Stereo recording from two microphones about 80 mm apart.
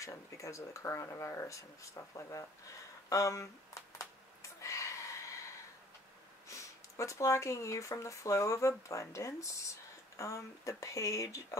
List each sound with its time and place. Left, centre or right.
0.0 s speech: left
4.4 s gasp: left
6.5 s speech: left